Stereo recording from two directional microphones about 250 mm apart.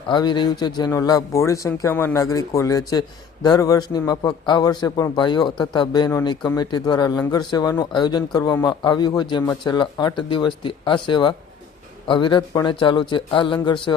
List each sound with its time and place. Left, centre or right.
0.1 s a man's voice: centre